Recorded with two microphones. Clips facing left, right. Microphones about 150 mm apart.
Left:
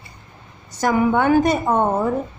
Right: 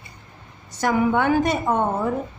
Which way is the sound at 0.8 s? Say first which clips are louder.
Left 2 dB; 40° left (ahead or behind).